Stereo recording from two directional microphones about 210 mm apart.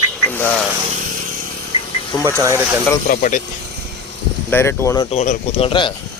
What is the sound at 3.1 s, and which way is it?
Speech, 40° left (ahead or behind).